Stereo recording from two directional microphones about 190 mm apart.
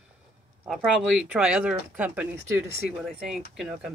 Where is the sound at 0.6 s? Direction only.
5° right (ahead or behind).